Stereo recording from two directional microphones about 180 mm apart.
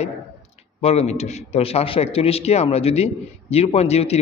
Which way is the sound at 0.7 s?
35° left (ahead or behind).